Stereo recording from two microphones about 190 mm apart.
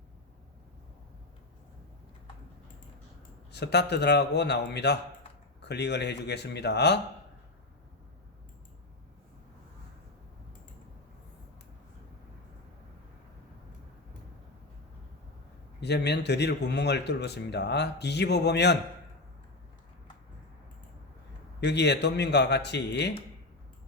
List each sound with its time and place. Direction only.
3.5 s speech: 60° left (ahead or behind)
15.8 s speech: 65° left (ahead or behind)
21.6 s speech: 65° left (ahead or behind)